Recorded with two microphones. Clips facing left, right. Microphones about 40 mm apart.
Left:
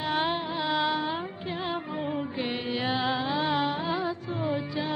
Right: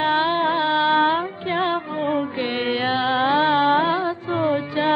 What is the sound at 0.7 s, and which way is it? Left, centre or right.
Carnatic music, right.